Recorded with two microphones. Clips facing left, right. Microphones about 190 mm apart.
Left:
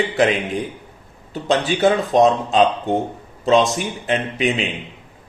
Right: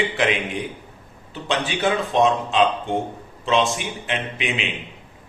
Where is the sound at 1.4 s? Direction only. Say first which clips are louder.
Left 6 dB; 40° left (ahead or behind).